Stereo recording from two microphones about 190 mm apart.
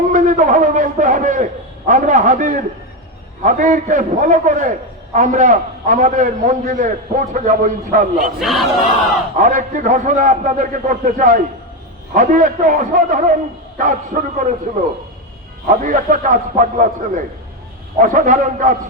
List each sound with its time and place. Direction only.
0.1 s a sound: 40° right (ahead or behind)
1.9 s a man's voice: 40° right (ahead or behind)
8.2 s speech: centre (ahead or behind)
9.4 s a man's voice: 40° right (ahead or behind)